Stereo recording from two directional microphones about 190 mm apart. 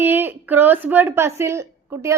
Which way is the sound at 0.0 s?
10° right (ahead or behind).